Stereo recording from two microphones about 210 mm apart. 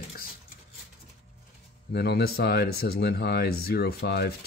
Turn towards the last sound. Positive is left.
turn(degrees=50)  # may be behind; listen again after turning